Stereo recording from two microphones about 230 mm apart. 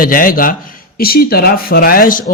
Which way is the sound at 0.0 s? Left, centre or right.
Left.